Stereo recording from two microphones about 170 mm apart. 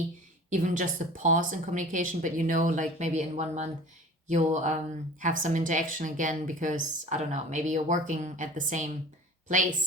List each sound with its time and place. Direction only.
0.5 s a woman's voice: 50° right (ahead or behind)